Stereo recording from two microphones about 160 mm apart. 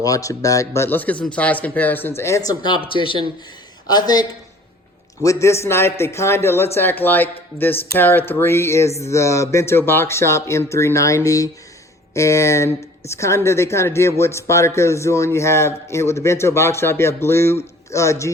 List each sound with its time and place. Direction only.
0.0 s a man's voice: 20° left (ahead or behind)